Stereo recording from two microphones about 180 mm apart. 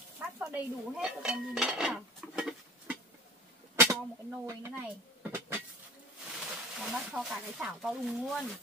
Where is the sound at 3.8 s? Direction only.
15° right (ahead or behind).